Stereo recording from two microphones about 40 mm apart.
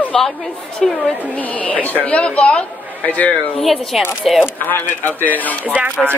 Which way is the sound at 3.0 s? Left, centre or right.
Left.